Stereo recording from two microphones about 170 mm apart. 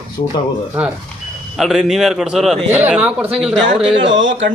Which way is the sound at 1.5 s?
Centre (ahead or behind).